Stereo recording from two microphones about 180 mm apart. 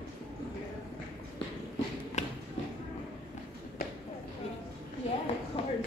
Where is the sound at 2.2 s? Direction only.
40° left (ahead or behind).